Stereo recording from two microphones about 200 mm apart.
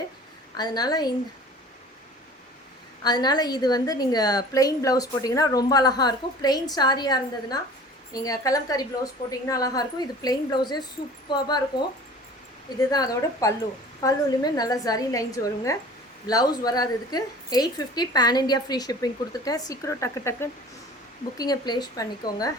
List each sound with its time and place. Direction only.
0.5 s a woman's voice: 20° left (ahead or behind)
3.0 s a woman's voice: 20° left (ahead or behind)
12.8 s a woman's voice: 20° left (ahead or behind)